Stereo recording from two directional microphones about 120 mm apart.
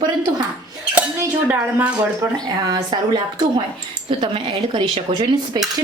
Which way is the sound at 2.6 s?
35° right (ahead or behind).